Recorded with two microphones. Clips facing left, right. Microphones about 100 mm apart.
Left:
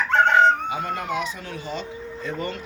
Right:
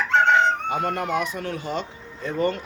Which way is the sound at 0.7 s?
55° right (ahead or behind).